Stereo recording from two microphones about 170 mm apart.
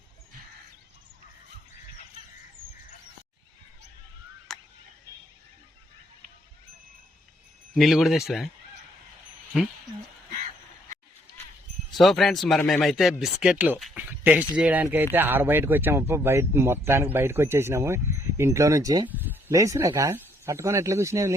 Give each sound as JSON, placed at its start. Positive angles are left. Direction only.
{"t": 4.5, "sound": "a sound", "side_deg": 0}
{"t": 7.8, "sound": "a man's voice", "side_deg": 0}
{"t": 11.9, "sound": "a man's voice", "side_deg": 0}